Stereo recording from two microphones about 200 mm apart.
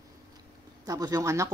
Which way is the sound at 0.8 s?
15° right (ahead or behind).